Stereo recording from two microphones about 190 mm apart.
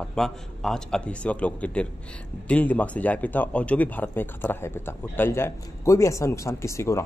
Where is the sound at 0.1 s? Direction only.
Centre (ahead or behind).